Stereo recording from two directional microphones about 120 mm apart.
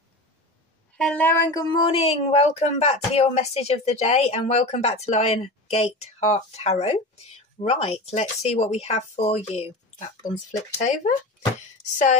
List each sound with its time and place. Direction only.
0.9 s a woman's voice: 10° left (ahead or behind)
1.5 s speech: 40° left (ahead or behind); by 11.1 s 90° left